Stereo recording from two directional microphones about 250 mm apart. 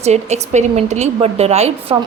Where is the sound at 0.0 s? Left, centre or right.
Right.